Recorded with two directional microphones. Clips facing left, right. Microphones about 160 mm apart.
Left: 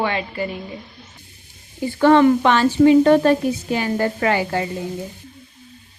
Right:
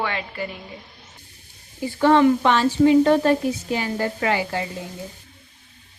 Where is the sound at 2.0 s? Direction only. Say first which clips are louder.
Left 3 dB; 60° left (ahead or behind).